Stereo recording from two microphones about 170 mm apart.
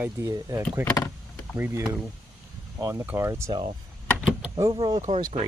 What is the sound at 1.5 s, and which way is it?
Speech, 15° right (ahead or behind).